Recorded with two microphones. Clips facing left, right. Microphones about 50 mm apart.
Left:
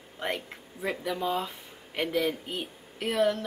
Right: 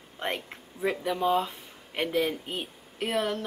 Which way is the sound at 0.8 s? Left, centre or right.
Centre.